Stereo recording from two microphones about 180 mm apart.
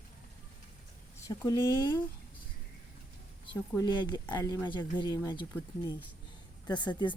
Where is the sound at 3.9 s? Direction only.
25° left (ahead or behind).